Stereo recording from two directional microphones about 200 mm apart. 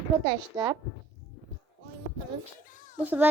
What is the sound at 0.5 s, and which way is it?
Speech, 20° right (ahead or behind).